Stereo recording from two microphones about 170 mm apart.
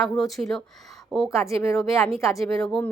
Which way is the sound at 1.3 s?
15° left (ahead or behind).